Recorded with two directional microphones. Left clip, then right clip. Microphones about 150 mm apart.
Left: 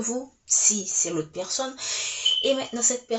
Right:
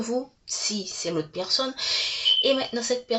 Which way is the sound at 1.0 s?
20° right (ahead or behind).